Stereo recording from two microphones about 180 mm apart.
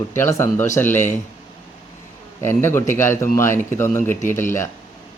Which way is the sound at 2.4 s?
15° left (ahead or behind).